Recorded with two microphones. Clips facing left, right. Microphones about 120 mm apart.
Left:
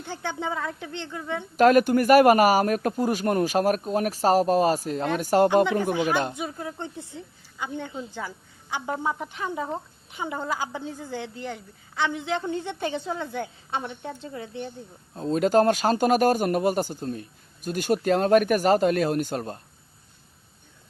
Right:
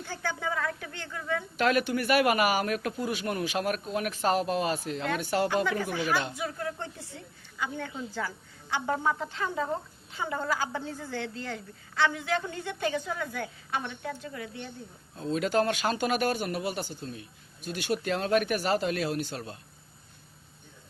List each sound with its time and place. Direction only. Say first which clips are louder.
0.0 s speech: left 3 dB; 20° left (ahead or behind)
1.5 s speech: left 10 dB; 45° left (ahead or behind)
5.6 s speech: left 5 dB; 20° left (ahead or behind)
15.1 s speech: left 6 dB; 40° left (ahead or behind)